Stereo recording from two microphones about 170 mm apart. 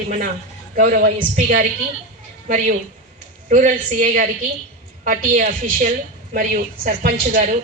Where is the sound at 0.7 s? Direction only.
60° right (ahead or behind).